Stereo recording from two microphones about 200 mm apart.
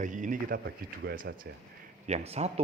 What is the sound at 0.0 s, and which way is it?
A man's voice, 40° right (ahead or behind).